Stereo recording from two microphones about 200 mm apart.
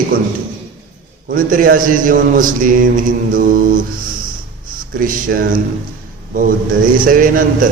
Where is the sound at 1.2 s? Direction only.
45° right (ahead or behind).